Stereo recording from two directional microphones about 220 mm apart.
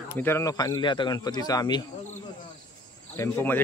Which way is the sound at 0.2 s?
10° left (ahead or behind).